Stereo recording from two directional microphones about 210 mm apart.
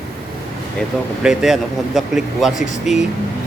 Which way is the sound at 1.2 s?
Centre (ahead or behind).